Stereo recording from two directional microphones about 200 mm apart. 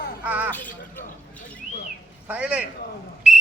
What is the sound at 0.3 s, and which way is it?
Speech, 5° right (ahead or behind).